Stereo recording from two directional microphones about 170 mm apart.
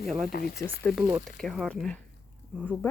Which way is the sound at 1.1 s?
Centre (ahead or behind).